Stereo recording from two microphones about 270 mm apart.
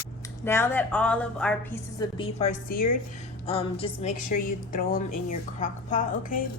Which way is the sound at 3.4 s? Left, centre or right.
Left.